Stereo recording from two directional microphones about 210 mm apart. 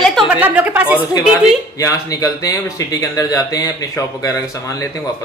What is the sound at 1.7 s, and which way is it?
Speech, 15° left (ahead or behind).